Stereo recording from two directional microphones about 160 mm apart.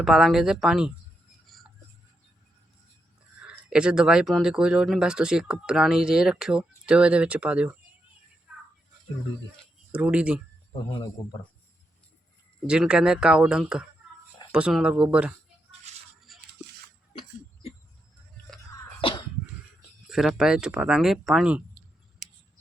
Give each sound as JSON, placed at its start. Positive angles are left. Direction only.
{"t": 0.0, "sound": "speech", "side_deg": 0}
{"t": 3.4, "sound": "speech", "side_deg": -5}
{"t": 9.9, "sound": "speech", "side_deg": -10}
{"t": 10.7, "sound": "speech", "side_deg": 30}
{"t": 12.6, "sound": "speech", "side_deg": -5}
{"t": 15.9, "sound": "a sound", "side_deg": -45}
{"t": 16.3, "sound": "music", "side_deg": 0}
{"t": 17.1, "sound": "a sound", "side_deg": 40}
{"t": 20.1, "sound": "speech", "side_deg": 0}